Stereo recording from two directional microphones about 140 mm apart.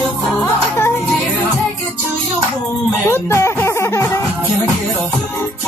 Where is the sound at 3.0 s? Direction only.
20° left (ahead or behind).